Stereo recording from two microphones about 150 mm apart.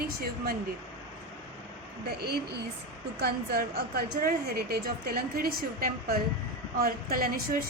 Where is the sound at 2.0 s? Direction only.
90° right.